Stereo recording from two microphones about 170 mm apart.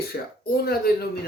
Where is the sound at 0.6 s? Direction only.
65° left (ahead or behind).